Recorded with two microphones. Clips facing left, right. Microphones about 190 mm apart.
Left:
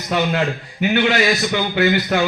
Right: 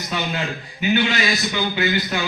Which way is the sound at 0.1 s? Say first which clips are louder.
Left 7 dB; 55° left (ahead or behind).